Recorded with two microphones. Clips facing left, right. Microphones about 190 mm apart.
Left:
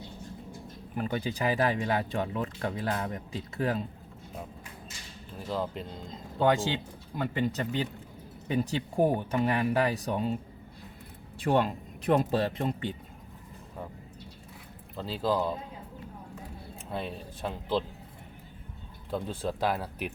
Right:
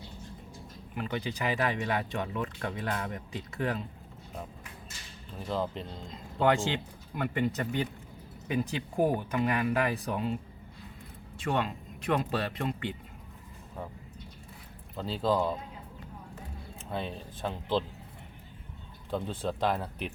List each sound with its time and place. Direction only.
0.9 s speech: 35° left (ahead or behind)
5.5 s speech: 5° left (ahead or behind)
6.4 s speech: 20° left (ahead or behind)
7.2 s speech: 30° left (ahead or behind)
9.1 s speech: 30° left (ahead or behind)
11.4 s speech: 35° left (ahead or behind)
12.4 s speech: 30° left (ahead or behind)
14.9 s speech: centre (ahead or behind)
16.9 s speech: 5° left (ahead or behind)
19.1 s speech: 5° left (ahead or behind)